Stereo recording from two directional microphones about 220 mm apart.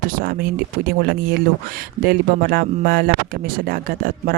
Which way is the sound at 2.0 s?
45° right (ahead or behind).